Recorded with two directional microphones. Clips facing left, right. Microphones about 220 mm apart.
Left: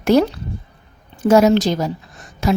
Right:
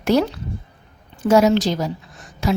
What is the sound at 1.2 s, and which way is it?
Speech, 50° left (ahead or behind).